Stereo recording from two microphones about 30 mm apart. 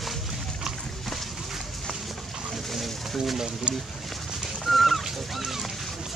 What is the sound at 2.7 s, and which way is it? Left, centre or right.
Bird, centre.